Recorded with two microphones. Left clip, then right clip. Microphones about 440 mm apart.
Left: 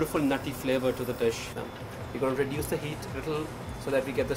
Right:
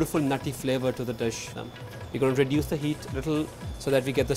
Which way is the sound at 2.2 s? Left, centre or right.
Right.